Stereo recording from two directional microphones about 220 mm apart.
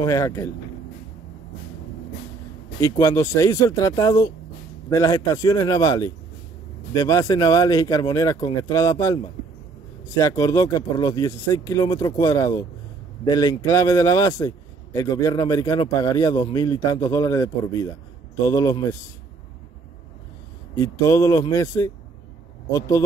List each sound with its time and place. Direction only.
0.0 s a man's voice: 15° left (ahead or behind)
2.8 s a man's voice: 15° left (ahead or behind)
18.5 s a man's voice: 15° left (ahead or behind)
20.8 s a man's voice: 15° left (ahead or behind)